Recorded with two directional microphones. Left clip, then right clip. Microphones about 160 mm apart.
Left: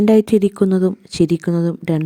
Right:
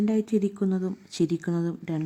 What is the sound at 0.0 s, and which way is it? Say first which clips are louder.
A woman's voice: left 13 dB; 60° left (ahead or behind).